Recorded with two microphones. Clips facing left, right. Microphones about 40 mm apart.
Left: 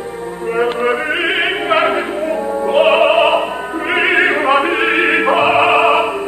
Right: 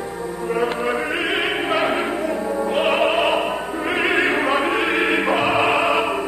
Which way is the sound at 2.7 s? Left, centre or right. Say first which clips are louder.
Left 8 dB; left.